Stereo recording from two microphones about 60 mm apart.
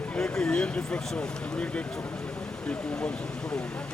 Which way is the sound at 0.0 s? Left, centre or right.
Centre.